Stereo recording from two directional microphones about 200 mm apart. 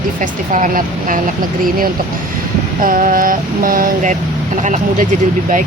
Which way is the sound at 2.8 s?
45° right (ahead or behind).